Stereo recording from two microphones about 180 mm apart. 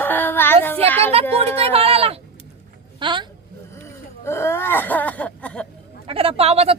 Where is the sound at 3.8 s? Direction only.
15° left (ahead or behind).